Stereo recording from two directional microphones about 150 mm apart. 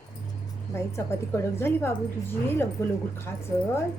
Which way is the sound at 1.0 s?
15° left (ahead or behind).